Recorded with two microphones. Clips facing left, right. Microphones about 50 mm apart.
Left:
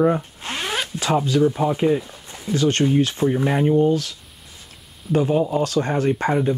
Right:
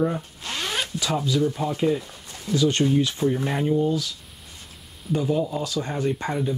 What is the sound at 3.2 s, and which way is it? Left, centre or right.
Speech, centre.